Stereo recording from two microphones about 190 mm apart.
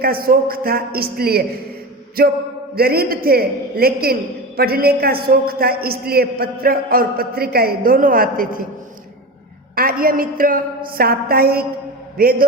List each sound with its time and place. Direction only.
0.0 s a man's voice: 50° right (ahead or behind)
9.7 s a man's voice: 50° right (ahead or behind)